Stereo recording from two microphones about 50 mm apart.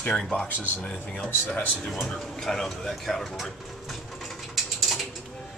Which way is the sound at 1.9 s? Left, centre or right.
Centre.